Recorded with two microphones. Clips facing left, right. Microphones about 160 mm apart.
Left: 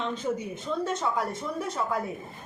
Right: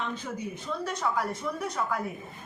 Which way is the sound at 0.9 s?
25° left (ahead or behind).